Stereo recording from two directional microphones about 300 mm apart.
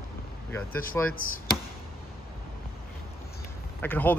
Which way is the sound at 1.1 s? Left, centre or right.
Left.